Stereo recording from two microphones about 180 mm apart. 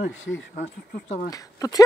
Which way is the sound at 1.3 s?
20° left (ahead or behind).